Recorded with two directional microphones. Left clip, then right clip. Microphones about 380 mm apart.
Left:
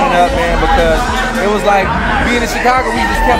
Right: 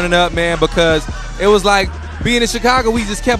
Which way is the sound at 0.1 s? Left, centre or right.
Right.